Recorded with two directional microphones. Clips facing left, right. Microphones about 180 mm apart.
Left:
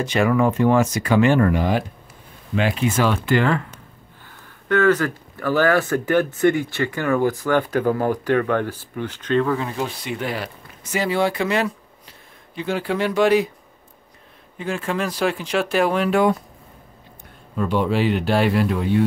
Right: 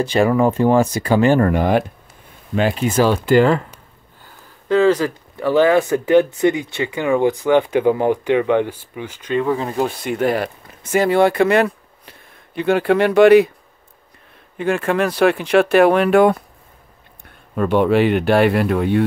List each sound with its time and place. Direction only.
0.0 s speech: 30° right (ahead or behind)
1.5 s speech: 55° right (ahead or behind)
2.5 s speech: 35° right (ahead or behind)
5.4 s speech: 20° right (ahead or behind)
9.7 s speech: 45° right (ahead or behind); by 13.5 s 65° right (ahead or behind)
14.6 s speech: 65° right (ahead or behind)
17.6 s speech: 60° right (ahead or behind)